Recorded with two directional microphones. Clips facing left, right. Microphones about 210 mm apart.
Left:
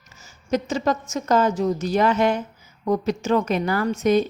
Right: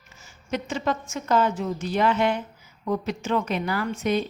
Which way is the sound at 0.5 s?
40° left (ahead or behind).